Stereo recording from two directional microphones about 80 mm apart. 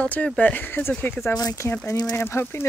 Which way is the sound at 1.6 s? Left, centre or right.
Left.